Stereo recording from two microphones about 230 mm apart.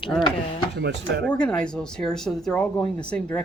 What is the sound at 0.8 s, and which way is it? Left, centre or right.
Speech, right.